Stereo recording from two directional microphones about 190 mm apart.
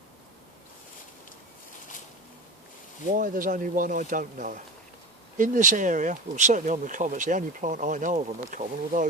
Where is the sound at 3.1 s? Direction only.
45° right (ahead or behind).